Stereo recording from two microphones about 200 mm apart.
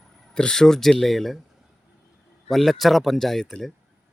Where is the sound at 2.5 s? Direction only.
Centre (ahead or behind).